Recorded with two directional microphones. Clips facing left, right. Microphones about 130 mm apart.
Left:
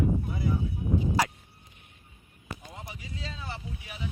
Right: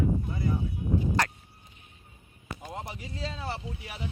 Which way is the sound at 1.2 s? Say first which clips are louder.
Left 3 dB; 10° left (ahead or behind).